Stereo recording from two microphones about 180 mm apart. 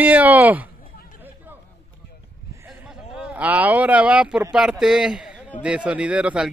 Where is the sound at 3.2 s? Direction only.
10° right (ahead or behind).